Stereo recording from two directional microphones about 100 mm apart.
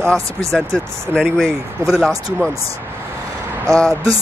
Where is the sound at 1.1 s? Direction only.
10° left (ahead or behind).